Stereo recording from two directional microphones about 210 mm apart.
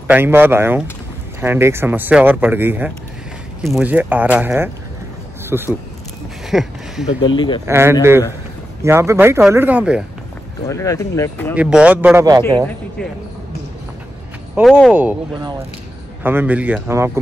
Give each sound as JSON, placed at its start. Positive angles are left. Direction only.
{"t": 0.1, "sound": "speech", "side_deg": -10}
{"t": 7.2, "sound": "speech", "side_deg": 20}
{"t": 7.6, "sound": "speech", "side_deg": -10}
{"t": 10.7, "sound": "speech", "side_deg": 15}
{"t": 11.5, "sound": "speech", "side_deg": -5}
{"t": 14.5, "sound": "speech", "side_deg": 0}
{"t": 16.2, "sound": "speech", "side_deg": -10}